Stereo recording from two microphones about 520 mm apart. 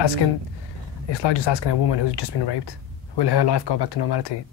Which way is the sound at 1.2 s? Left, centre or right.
Left.